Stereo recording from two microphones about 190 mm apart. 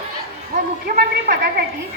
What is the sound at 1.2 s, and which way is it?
Speech, 50° right (ahead or behind).